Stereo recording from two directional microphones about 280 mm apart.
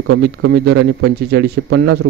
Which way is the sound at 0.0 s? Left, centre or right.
Right.